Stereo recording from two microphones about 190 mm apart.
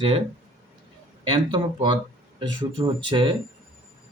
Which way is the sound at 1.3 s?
25° right (ahead or behind).